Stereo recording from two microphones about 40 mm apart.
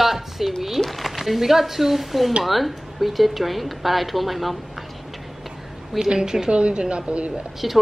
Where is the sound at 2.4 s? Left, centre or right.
Centre.